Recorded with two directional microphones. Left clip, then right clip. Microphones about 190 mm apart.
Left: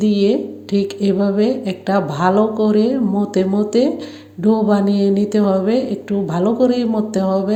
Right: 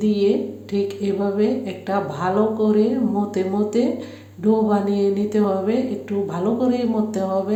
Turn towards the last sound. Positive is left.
turn(degrees=30)  # may be behind; listen again after turning